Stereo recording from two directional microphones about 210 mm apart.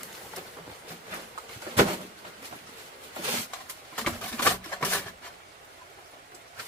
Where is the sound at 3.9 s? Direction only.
5° left (ahead or behind).